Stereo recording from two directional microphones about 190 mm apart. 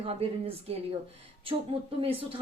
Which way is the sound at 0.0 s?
30° right (ahead or behind).